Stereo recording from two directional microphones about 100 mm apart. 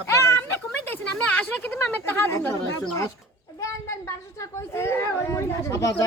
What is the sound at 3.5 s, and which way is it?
Speech, 30° left (ahead or behind).